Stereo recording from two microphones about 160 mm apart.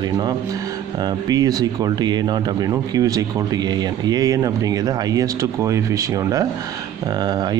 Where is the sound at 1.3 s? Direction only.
25° right (ahead or behind).